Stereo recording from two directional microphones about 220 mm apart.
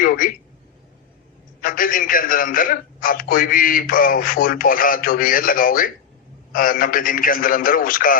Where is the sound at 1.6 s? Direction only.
40° left (ahead or behind).